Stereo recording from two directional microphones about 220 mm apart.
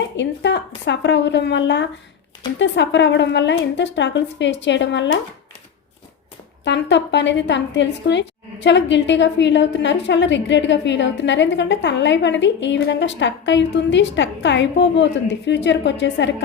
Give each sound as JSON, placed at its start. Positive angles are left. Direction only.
{"t": 0.2, "sound": "a woman's voice", "side_deg": 55}
{"t": 6.7, "sound": "a woman's voice", "side_deg": 55}